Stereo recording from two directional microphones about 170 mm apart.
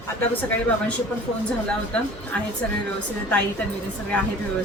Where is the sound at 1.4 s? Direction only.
5° left (ahead or behind).